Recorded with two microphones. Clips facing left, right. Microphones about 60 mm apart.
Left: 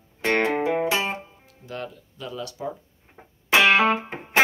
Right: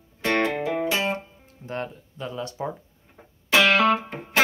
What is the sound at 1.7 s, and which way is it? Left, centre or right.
Speech, right.